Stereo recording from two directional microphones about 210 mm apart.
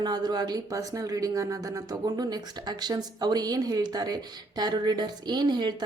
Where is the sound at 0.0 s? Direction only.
20° right (ahead or behind).